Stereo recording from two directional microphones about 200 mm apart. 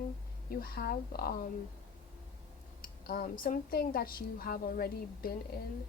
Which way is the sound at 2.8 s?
50° left (ahead or behind).